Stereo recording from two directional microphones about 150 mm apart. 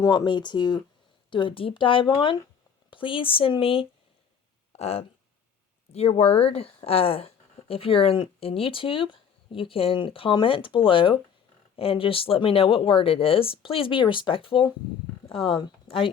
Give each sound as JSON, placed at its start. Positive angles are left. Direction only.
{"t": 0.0, "sound": "speech", "side_deg": 25}